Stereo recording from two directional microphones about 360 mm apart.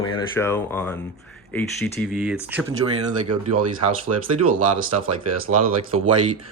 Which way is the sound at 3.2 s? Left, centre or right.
Right.